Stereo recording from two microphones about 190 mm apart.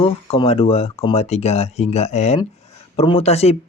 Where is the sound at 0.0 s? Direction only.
30° left (ahead or behind).